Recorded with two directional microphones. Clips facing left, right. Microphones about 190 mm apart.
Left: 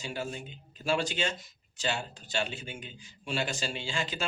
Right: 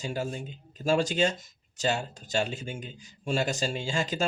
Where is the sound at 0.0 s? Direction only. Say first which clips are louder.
Right 4 dB; 40° right (ahead or behind).